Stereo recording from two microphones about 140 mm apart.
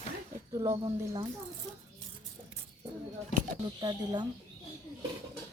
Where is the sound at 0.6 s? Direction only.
25° right (ahead or behind).